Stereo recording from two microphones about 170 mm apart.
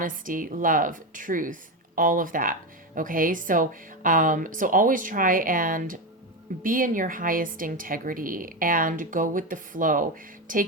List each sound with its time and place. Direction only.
0.0 s speech: 50° right (ahead or behind)